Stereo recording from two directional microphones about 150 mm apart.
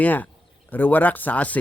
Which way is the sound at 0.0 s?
10° left (ahead or behind).